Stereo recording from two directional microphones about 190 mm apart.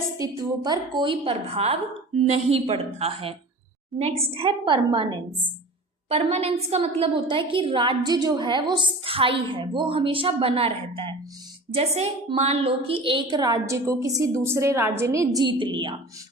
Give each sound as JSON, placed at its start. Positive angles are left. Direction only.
{"t": 0.2, "sound": "a woman's voice", "side_deg": -20}
{"t": 4.4, "sound": "a woman's voice", "side_deg": -25}